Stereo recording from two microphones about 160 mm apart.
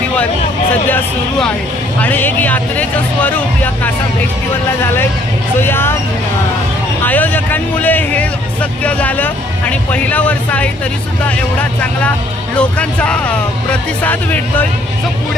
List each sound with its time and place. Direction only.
0.9 s speech: 10° left (ahead or behind)
5.5 s speech: 15° left (ahead or behind)
7.0 s speech: 10° left (ahead or behind)
11.8 s speech: 10° left (ahead or behind)